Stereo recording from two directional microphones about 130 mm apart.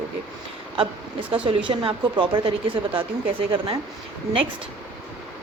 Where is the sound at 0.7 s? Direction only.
45° right (ahead or behind).